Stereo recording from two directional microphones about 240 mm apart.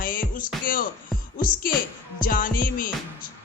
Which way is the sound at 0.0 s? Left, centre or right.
Left.